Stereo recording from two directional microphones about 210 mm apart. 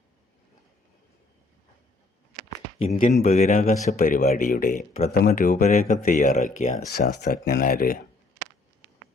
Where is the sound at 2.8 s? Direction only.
30° left (ahead or behind).